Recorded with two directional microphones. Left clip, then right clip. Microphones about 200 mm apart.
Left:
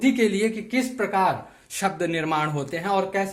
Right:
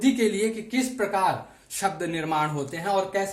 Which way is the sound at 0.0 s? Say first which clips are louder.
Left 2 dB; 45° left (ahead or behind).